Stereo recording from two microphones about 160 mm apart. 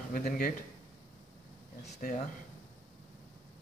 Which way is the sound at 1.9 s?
50° left (ahead or behind).